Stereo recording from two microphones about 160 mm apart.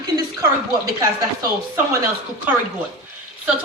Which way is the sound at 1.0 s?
20° right (ahead or behind).